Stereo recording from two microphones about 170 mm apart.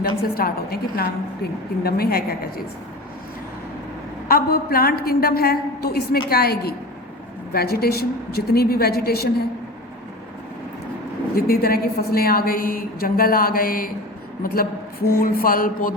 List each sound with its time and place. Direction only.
0.0 s a woman's voice: 60° left (ahead or behind)
4.3 s a woman's voice: 60° left (ahead or behind)
11.3 s a woman's voice: 60° left (ahead or behind)